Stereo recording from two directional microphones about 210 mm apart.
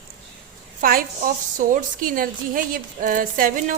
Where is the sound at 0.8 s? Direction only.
45° right (ahead or behind).